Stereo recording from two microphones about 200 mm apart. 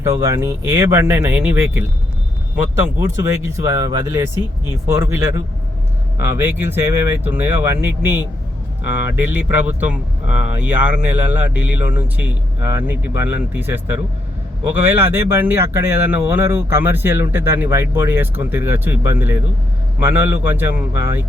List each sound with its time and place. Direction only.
0.0 s speech: 15° right (ahead or behind)
3.2 s speech: 15° right (ahead or behind)
8.8 s speech: 60° left (ahead or behind)
9.1 s speech: 10° right (ahead or behind)